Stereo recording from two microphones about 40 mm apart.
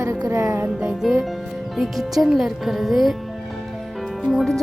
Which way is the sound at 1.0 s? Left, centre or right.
Centre.